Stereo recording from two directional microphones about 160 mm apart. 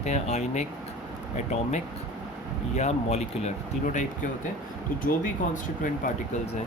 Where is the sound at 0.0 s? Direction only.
45° left (ahead or behind).